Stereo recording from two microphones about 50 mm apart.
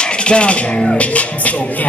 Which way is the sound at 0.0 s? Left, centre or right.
Left.